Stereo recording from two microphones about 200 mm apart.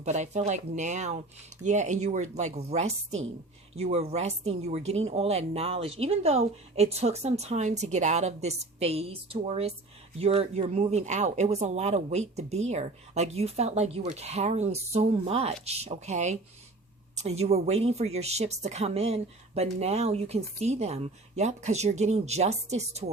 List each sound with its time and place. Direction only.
0.0 s speech: 35° right (ahead or behind)